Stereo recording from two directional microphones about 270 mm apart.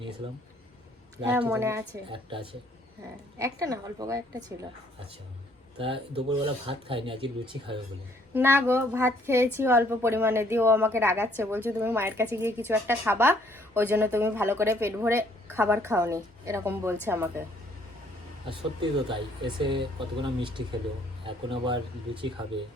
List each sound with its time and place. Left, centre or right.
1.3 s a woman's voice: centre
5.8 s speech: centre
8.3 s a woman's voice: centre
18.4 s speech: centre